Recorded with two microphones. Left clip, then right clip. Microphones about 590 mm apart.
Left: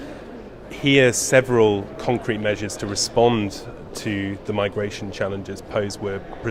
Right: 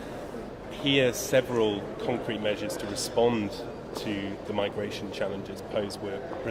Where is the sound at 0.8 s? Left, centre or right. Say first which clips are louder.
Left 8 dB; left.